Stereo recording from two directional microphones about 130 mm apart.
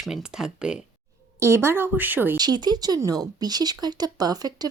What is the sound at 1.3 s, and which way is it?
Speech, 20° right (ahead or behind).